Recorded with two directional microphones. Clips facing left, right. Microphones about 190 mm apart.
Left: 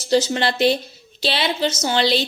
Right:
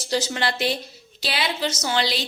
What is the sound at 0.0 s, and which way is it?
A woman's voice, 25° left (ahead or behind).